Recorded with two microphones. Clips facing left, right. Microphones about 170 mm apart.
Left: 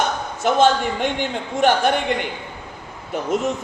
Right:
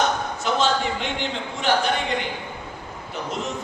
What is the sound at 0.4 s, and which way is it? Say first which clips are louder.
Speech: left 6 dB; 50° left (ahead or behind).